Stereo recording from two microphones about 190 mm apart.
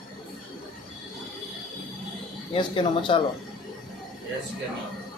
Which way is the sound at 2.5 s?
25° left (ahead or behind).